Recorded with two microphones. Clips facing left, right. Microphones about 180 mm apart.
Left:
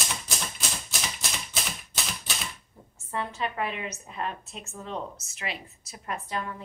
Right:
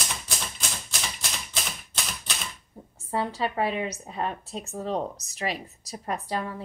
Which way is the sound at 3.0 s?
35° right (ahead or behind).